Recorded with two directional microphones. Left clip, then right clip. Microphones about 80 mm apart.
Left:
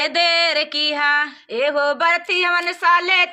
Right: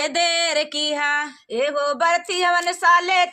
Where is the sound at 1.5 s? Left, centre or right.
Left.